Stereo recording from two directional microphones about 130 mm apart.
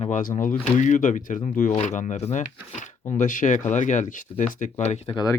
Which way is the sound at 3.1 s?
80° left.